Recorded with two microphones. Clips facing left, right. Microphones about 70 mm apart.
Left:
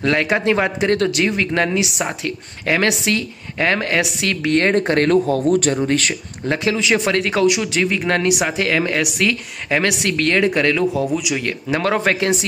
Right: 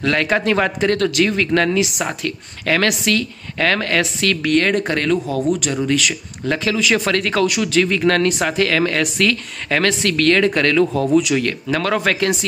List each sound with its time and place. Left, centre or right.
0.0 s speech: left
6.5 s speech: left; by 11.4 s centre
11.4 s speech: left